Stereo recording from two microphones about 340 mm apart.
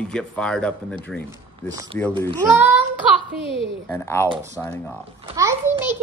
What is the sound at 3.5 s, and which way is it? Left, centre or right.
Speech, centre.